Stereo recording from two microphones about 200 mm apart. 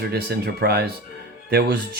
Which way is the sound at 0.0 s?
50° right (ahead or behind).